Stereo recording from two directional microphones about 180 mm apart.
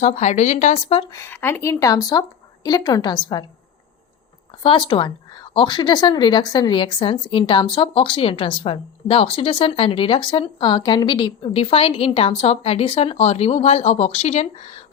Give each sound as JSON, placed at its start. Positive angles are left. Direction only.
{"t": 0.0, "sound": "speech", "side_deg": 40}
{"t": 1.1, "sound": "speech", "side_deg": 15}
{"t": 4.6, "sound": "speech", "side_deg": 25}